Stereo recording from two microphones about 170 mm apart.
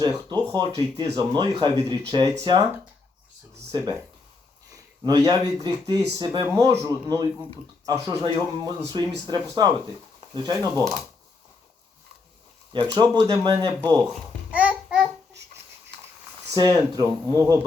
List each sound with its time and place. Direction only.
0.0 s speech: 25° right (ahead or behind)
3.5 s a sound: 25° right (ahead or behind)
5.0 s speech: 20° right (ahead or behind)
12.7 s speech: 25° right (ahead or behind)
14.5 s babbling: 10° right (ahead or behind)
16.6 s speech: 20° right (ahead or behind)